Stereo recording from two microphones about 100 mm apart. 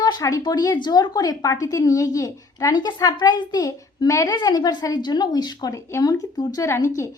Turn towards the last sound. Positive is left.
turn(degrees=30)  # may be behind; listen again after turning